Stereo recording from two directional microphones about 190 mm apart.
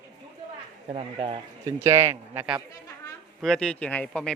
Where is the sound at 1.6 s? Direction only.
15° right (ahead or behind).